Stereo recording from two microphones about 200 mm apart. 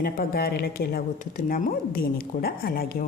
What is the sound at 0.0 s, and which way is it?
A woman's voice, 50° left (ahead or behind).